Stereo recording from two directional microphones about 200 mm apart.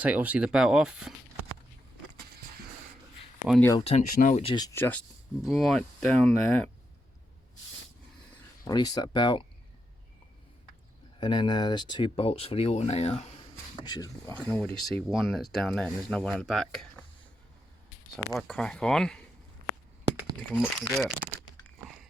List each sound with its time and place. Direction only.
0.0 s speech: 5° right (ahead or behind)
3.6 s speech: 15° left (ahead or behind)
3.8 s speech: 35° left (ahead or behind)
4.4 s speech: 20° left (ahead or behind)
5.5 s speech: centre (ahead or behind)
8.6 s speech: 20° left (ahead or behind)
11.2 s speech: 25° left (ahead or behind)
13.8 s speech: 20° left (ahead or behind)
14.3 s speech: 5° left (ahead or behind)
18.3 s speech: 5° left (ahead or behind)
20.6 s speech: centre (ahead or behind)